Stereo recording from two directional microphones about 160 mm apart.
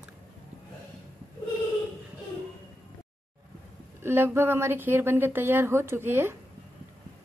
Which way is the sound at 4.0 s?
15° right (ahead or behind).